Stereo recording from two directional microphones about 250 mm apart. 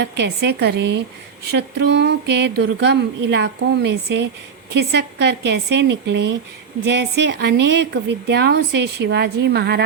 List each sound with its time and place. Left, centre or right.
0.0 s a woman's voice: right